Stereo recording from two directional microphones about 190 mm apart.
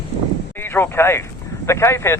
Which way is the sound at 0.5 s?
10° left (ahead or behind).